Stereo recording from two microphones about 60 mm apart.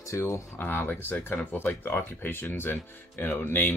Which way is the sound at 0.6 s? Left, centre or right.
Left.